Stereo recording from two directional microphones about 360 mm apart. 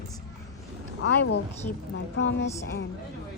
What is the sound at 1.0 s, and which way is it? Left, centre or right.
A woman's voice, left.